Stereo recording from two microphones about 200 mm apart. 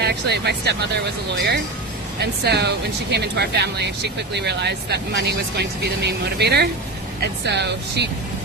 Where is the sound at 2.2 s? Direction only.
55° right (ahead or behind).